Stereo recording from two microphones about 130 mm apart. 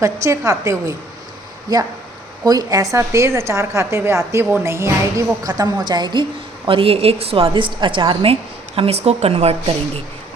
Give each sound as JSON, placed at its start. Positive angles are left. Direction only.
{"t": 0.0, "sound": "a woman's voice", "side_deg": -25}
{"t": 6.7, "sound": "a woman's voice", "side_deg": -45}